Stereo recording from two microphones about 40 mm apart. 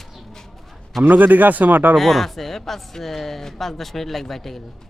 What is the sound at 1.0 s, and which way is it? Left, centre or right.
Speech, right.